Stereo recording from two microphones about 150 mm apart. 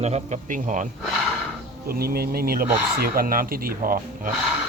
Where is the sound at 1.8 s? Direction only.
90° right; by 4.3 s 70° right (ahead or behind).